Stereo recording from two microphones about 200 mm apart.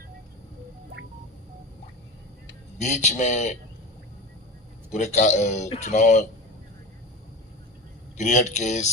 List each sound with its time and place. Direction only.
2.7 s speech: 35° left (ahead or behind)
4.9 s speech: 35° left (ahead or behind)
8.2 s speech: 35° left (ahead or behind)